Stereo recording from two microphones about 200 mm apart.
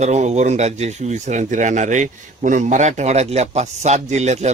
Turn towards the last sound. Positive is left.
turn(degrees=-35)  # may be behind; listen again after turning